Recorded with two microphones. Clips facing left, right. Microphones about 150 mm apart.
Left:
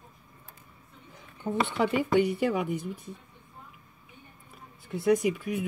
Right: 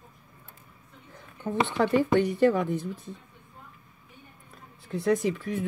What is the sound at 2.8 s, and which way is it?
Speech, 25° right (ahead or behind).